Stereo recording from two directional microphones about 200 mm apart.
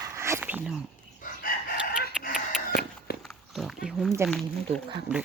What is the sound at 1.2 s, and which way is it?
Chicken, 45° left (ahead or behind).